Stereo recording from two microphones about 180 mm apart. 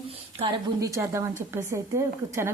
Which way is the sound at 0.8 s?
15° right (ahead or behind).